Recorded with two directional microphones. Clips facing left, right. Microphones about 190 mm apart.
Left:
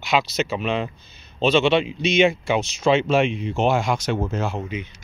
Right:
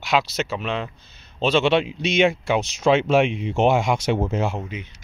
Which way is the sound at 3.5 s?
20° right (ahead or behind).